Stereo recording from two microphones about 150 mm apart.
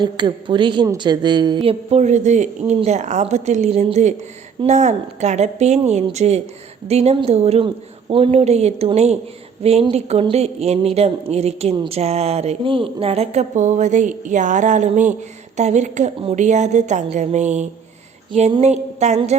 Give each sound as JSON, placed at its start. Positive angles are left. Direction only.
{"t": 0.0, "sound": "a woman's voice", "side_deg": -30}
{"t": 1.9, "sound": "speech", "side_deg": -50}